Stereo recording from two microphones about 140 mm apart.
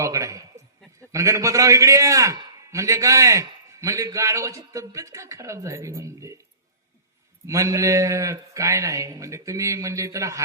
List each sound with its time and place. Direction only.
0.0 s a sound: 25° right (ahead or behind)
1.1 s a man's voice: 20° right (ahead or behind)
7.4 s a man's voice: 20° right (ahead or behind)